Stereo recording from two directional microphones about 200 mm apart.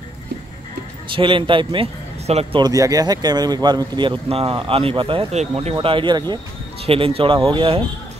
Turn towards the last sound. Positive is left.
turn(degrees=-25)  # may be behind; listen again after turning